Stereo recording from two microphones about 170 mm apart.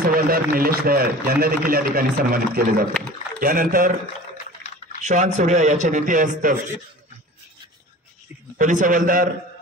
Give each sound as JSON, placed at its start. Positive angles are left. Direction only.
{"t": 0.0, "sound": "a man's voice", "side_deg": -60}
{"t": 5.0, "sound": "a man's voice", "side_deg": -45}
{"t": 8.5, "sound": "a man's voice", "side_deg": -50}